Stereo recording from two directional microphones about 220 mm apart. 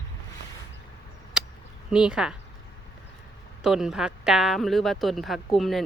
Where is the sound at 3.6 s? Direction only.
Centre (ahead or behind).